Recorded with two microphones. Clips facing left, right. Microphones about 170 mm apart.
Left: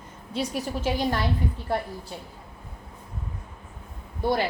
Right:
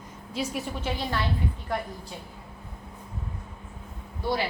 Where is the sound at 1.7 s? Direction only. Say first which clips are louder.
Left 4 dB; 30° left (ahead or behind).